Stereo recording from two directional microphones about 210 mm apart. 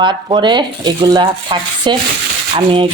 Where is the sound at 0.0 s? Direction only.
20° right (ahead or behind).